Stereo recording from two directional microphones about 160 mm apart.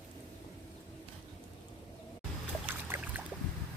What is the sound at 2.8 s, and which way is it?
Boat, 15° right (ahead or behind).